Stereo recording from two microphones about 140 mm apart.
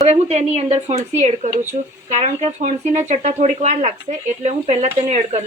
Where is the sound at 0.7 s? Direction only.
55° right (ahead or behind).